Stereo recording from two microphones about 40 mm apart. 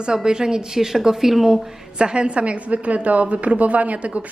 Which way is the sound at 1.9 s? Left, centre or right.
Right.